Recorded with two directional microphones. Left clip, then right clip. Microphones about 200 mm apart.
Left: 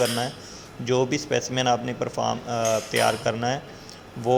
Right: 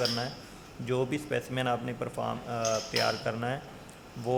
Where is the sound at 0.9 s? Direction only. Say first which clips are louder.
Left 8 dB; 15° left (ahead or behind).